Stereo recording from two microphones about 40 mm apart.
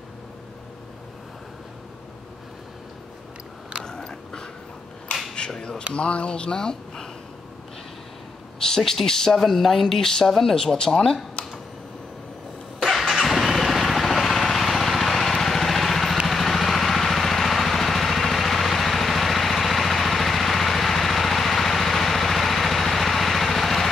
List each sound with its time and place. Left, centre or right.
3.8 s biting: centre
5.6 s speech: left
8.6 s a sound: centre
9.0 s speech: centre
12.8 s vehicle: centre